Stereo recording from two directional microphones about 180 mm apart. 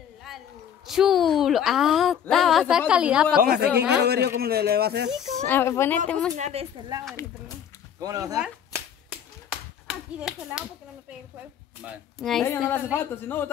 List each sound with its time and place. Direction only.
0.3 s a sound: centre (ahead or behind)
0.8 s a woman's voice: centre (ahead or behind)
3.3 s a man's voice: 55° right (ahead or behind)
5.5 s a woman's voice: 15° left (ahead or behind)
6.3 s a woman's voice: 35° right (ahead or behind)
8.0 s speech: 20° right (ahead or behind)
9.8 s speech: 5° right (ahead or behind)
11.8 s a woman's voice: 5° right (ahead or behind)
12.4 s speech: 15° left (ahead or behind)